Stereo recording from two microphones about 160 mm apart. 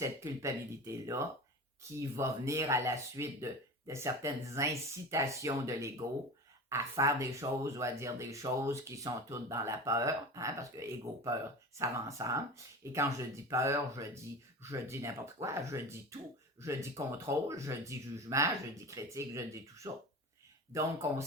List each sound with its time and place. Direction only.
0.0 s speech: 20° right (ahead or behind)